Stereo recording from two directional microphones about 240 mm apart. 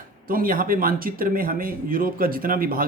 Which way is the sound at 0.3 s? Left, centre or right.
Right.